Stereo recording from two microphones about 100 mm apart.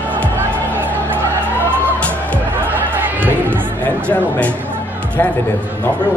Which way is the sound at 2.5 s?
20° right (ahead or behind).